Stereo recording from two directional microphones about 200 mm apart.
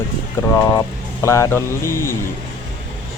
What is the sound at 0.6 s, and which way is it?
Speech, 15° left (ahead or behind).